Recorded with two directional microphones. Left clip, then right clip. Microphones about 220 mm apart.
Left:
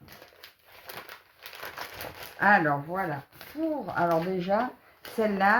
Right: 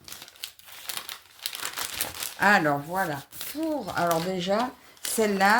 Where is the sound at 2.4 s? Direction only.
40° right (ahead or behind).